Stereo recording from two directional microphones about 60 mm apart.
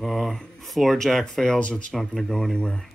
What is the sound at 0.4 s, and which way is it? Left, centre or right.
Speech, centre.